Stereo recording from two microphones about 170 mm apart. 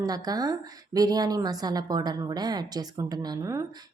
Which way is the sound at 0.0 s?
20° right (ahead or behind).